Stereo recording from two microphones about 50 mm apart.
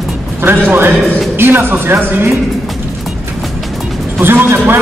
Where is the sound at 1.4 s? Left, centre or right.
Right.